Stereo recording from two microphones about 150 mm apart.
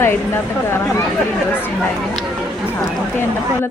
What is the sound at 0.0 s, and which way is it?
Speech, 15° left (ahead or behind).